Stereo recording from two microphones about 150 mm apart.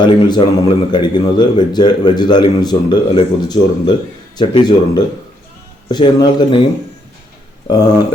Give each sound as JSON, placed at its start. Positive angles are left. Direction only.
{"t": 0.0, "sound": "a man's voice", "side_deg": 30}
{"t": 7.7, "sound": "speech", "side_deg": 25}